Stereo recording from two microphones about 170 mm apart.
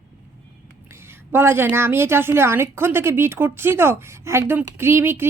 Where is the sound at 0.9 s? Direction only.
15° right (ahead or behind).